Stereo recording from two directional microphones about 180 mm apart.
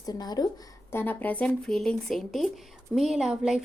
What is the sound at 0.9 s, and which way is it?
Speech, 10° left (ahead or behind).